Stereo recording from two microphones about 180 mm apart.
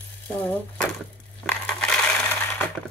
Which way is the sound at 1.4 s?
5° left (ahead or behind).